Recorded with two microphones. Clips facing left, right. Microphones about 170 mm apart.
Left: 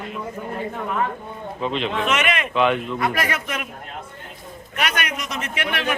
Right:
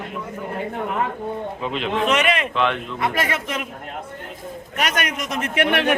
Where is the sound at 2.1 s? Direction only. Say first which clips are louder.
Right 4 dB; 35° right (ahead or behind).